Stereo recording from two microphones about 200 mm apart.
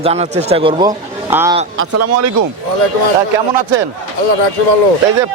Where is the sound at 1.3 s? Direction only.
10° right (ahead or behind).